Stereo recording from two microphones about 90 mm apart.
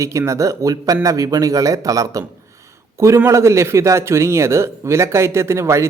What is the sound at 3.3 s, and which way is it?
Speech, 35° right (ahead or behind).